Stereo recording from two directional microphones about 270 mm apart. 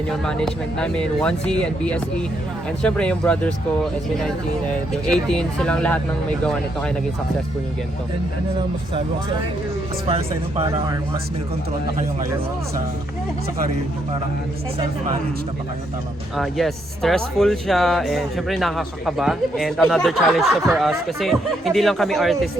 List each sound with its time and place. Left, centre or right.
0.1 s speech: centre
5.0 s speech: centre
10.1 s speech: right
16.4 s speech: centre